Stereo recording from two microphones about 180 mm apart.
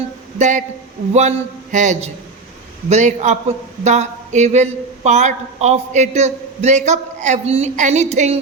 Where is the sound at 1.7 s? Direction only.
40° right (ahead or behind).